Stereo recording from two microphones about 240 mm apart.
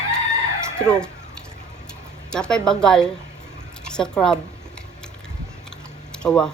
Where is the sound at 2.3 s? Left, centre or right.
Centre.